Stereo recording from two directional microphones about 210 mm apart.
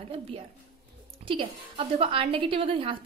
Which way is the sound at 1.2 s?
25° right (ahead or behind).